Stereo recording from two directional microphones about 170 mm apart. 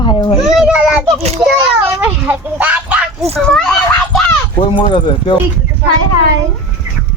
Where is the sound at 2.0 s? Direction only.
10° right (ahead or behind).